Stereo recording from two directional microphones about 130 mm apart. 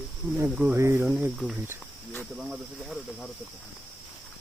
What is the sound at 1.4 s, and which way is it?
Speech, 5° right (ahead or behind).